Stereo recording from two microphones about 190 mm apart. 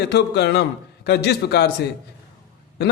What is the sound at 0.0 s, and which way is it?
A man's voice, 60° left (ahead or behind).